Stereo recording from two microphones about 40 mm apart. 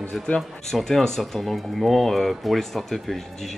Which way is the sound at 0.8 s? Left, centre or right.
Centre.